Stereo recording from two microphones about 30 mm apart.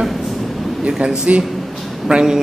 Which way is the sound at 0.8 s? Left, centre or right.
Right.